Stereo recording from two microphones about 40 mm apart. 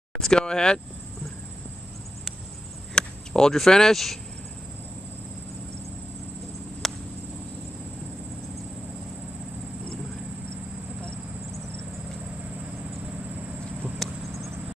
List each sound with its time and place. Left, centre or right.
0.2 s speech: centre
2.9 s speech: centre
6.8 s cricket: centre
13.9 s a sound: centre